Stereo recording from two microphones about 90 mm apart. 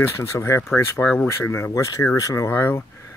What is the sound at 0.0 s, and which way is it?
Speech, 30° left (ahead or behind).